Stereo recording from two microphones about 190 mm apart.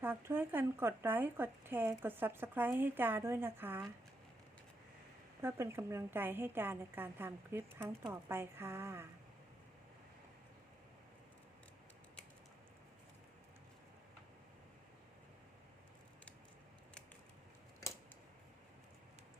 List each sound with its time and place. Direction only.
0.0 s speech: 10° right (ahead or behind)
5.4 s speech: 15° right (ahead or behind)